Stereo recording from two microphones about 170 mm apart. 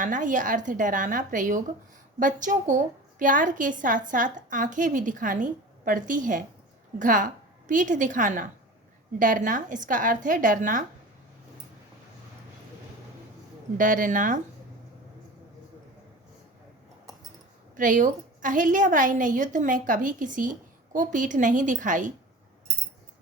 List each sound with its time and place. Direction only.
0.0 s a woman's voice: 50° right (ahead or behind)
13.7 s a woman's voice: 50° right (ahead or behind)
17.7 s a woman's voice: 50° right (ahead or behind)